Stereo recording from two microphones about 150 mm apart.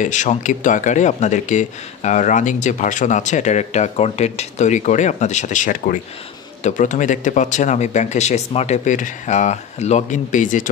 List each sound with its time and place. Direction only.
0.0 s speech: 55° left (ahead or behind)